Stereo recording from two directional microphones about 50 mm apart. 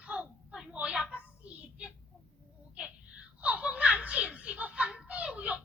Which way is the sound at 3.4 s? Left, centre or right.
Right.